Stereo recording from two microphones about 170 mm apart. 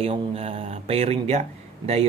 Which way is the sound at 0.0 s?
35° right (ahead or behind).